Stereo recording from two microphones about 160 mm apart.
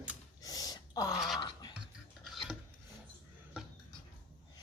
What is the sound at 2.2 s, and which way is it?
Rub, centre (ahead or behind).